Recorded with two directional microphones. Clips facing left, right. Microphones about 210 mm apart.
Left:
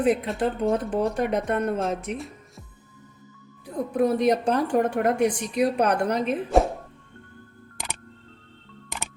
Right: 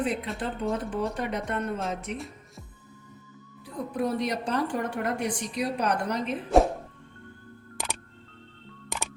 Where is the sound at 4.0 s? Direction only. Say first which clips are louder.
Left 7 dB; 50° left (ahead or behind).